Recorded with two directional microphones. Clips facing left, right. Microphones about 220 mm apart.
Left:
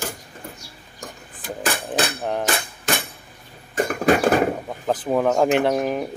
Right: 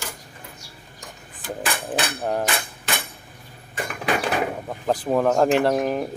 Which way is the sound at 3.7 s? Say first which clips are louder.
Left 7 dB; 45° left (ahead or behind).